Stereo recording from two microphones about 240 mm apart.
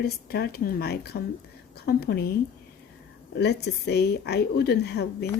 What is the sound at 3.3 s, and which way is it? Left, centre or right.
Speech, left.